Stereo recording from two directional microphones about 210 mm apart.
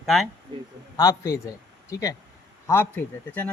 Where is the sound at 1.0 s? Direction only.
15° left (ahead or behind).